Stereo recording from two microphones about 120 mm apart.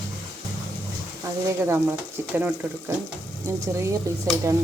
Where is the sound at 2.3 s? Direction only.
15° right (ahead or behind).